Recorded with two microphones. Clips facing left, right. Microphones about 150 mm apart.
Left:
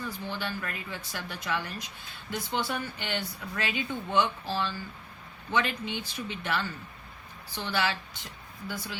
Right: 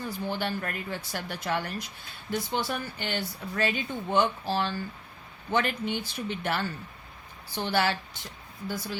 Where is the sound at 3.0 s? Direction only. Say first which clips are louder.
Right 2 dB; 35° right (ahead or behind).